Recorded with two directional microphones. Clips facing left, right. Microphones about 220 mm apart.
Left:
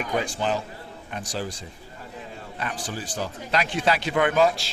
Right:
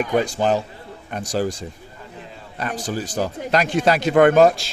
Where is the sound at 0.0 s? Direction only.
40° right (ahead or behind).